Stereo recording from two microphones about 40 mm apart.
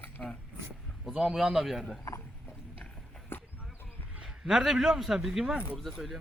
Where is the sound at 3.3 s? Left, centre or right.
Left.